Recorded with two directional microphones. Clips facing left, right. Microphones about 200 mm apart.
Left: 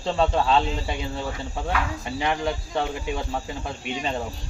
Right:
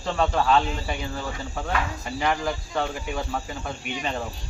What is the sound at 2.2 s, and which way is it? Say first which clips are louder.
Speech: even; 25° left (ahead or behind).